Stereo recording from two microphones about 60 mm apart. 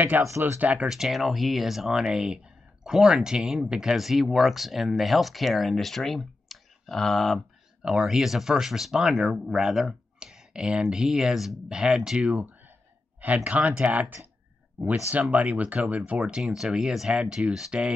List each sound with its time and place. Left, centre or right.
0.1 s speech: right
0.8 s speech: centre
7.8 s speech: centre
13.2 s speech: right
16.5 s speech: centre